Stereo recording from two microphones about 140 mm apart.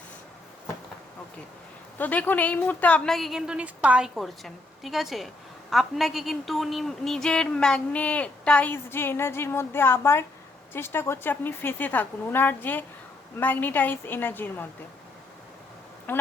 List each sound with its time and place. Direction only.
2.0 s a woman's voice: 10° left (ahead or behind)
16.1 s speech: 15° left (ahead or behind)